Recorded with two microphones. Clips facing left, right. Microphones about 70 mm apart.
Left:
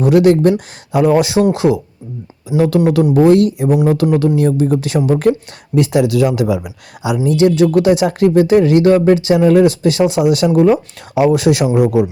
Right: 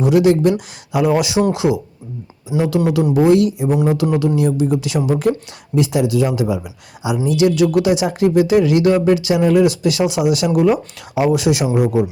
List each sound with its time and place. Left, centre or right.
0.0 s speech: left
4.0 s speech: centre
4.4 s speech: left
7.3 s speech: left
10.5 s speech: left
11.1 s speech: left
11.8 s a man's voice: left